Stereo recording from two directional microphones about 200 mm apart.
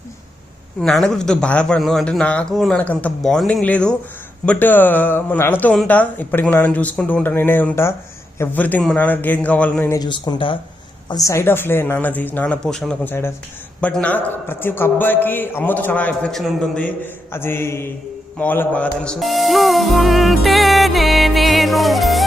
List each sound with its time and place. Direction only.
0.8 s speech: centre (ahead or behind)
10.0 s speech: 20° left (ahead or behind); by 22.2 s centre (ahead or behind)